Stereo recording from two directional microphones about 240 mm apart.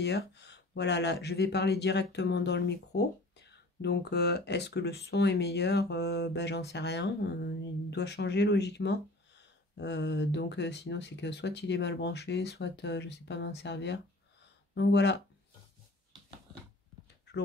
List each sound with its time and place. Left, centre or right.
0.0 s speech: left